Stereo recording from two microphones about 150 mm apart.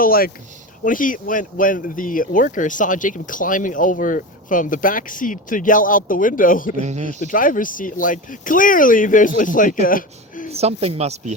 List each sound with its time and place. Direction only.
0.0 s speech: 80° left
0.9 s speech: 65° left (ahead or behind)
6.8 s speech: 50° right (ahead or behind)
7.2 s speech: 65° left (ahead or behind)
10.5 s speech: 45° right (ahead or behind)